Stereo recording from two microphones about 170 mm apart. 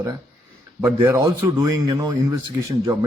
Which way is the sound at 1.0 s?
15° right (ahead or behind).